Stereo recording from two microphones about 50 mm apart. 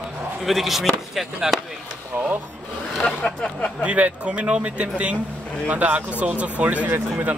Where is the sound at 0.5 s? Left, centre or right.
Centre.